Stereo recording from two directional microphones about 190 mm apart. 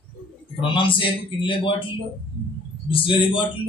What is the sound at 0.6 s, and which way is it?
A man's voice, 25° left (ahead or behind).